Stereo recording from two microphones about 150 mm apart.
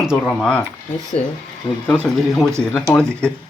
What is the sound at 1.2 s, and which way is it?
Speech, 45° left (ahead or behind).